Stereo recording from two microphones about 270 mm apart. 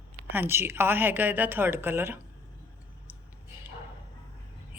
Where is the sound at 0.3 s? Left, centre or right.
Centre.